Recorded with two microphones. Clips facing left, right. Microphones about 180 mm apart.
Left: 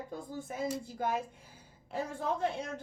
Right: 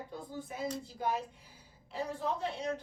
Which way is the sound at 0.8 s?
50° left (ahead or behind).